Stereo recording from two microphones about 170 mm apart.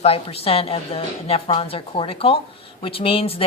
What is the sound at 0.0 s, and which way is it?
A woman's voice, 35° left (ahead or behind).